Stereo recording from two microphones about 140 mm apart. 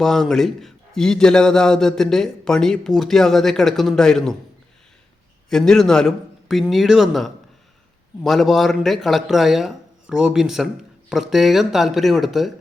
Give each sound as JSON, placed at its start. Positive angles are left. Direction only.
{"t": 0.0, "sound": "a man's voice", "side_deg": 5}
{"t": 5.5, "sound": "a man's voice", "side_deg": 5}